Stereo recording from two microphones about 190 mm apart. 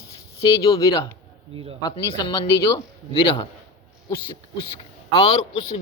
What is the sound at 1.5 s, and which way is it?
Speech, 30° right (ahead or behind).